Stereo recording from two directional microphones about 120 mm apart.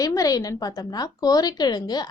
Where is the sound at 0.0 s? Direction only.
30° left (ahead or behind).